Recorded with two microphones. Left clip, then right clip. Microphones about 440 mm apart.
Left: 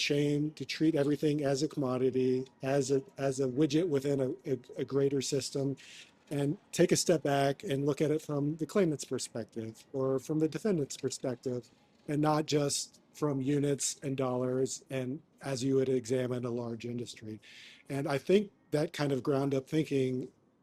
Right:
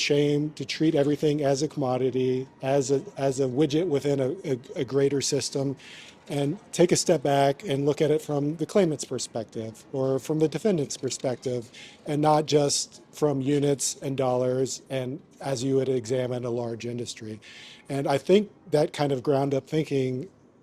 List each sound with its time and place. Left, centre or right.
0.0 s speech: right
10.0 s speech: right